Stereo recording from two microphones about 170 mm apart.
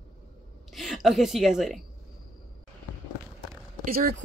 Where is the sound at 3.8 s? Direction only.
60° right (ahead or behind).